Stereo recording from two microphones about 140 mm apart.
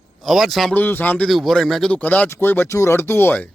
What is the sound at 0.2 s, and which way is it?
Speech, centre (ahead or behind).